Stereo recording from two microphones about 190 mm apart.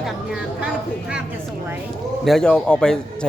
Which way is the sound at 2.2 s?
Centre (ahead or behind).